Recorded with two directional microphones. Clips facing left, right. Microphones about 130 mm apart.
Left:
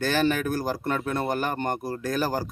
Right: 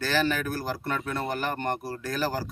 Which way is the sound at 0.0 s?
15° left (ahead or behind).